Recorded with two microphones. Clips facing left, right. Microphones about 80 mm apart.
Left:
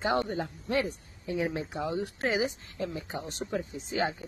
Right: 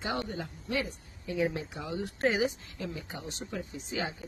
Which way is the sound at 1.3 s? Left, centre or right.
Left.